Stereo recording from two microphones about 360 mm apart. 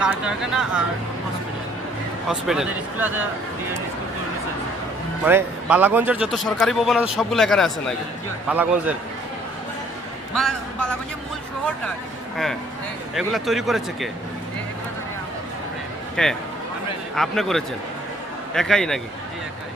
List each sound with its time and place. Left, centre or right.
0.0 s a man's voice: centre
2.2 s a man's voice: centre
5.2 s a man's voice: centre
10.4 s a sound: centre
13.3 s a man's voice: centre
16.2 s a man's voice: centre